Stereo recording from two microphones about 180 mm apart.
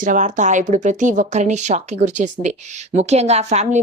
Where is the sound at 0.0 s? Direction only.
45° right (ahead or behind).